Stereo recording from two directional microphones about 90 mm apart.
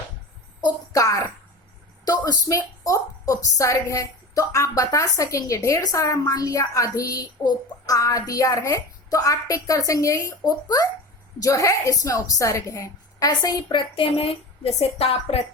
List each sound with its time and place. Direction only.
0.9 s a woman's voice: 40° left (ahead or behind)
13.9 s speech: 90° left